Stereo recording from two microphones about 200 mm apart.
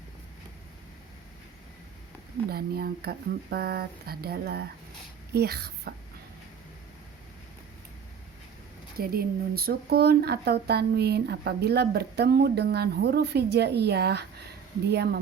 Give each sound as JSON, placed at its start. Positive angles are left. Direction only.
{"t": 2.5, "sound": "a child's voice", "side_deg": -50}
{"t": 9.0, "sound": "speech", "side_deg": -50}